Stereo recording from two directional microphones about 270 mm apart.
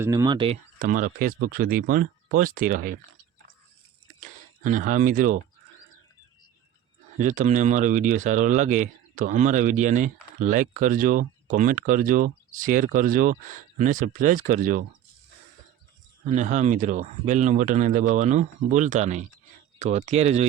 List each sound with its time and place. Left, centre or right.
0.0 s speech: centre
0.8 s speech: right
4.2 s speech: right
7.2 s speech: right
16.2 s speech: right